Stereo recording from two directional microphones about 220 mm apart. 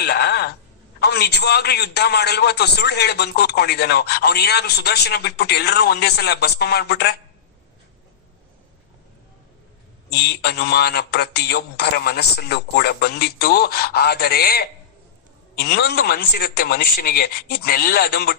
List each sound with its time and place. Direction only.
0.0 s a sound: 50° left (ahead or behind)
0.9 s a man's voice: 45° left (ahead or behind)
10.2 s a man's voice: 50° left (ahead or behind)